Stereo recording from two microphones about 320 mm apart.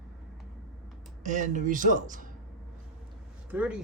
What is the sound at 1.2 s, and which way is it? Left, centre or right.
Speech, right.